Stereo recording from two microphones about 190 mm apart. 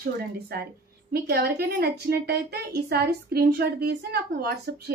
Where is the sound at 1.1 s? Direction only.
55° right (ahead or behind).